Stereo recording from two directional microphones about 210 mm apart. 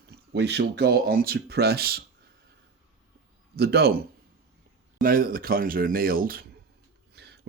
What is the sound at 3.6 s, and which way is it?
Speech, 50° right (ahead or behind).